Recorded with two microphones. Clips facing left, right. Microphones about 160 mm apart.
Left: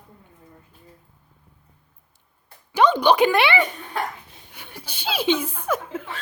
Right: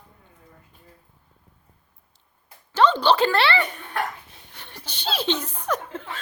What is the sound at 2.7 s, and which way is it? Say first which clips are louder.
Speech: left 2 dB; 15° left (ahead or behind).